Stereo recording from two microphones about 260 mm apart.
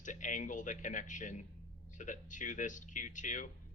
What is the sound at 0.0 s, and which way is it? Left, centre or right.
Speech, left.